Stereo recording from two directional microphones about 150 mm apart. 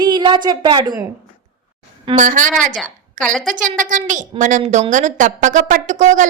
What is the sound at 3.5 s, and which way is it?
A woman's voice, 60° right (ahead or behind).